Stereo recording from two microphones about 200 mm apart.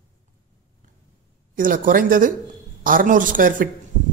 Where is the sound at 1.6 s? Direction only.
45° right (ahead or behind).